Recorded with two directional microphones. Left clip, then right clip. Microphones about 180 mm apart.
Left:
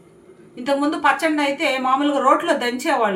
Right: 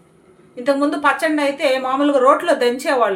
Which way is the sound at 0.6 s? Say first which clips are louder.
Right 2 dB; 45° right (ahead or behind).